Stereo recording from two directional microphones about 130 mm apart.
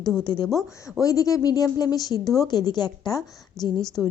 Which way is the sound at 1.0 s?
25° left (ahead or behind).